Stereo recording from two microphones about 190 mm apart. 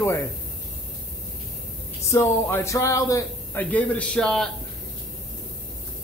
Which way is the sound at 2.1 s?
15° left (ahead or behind).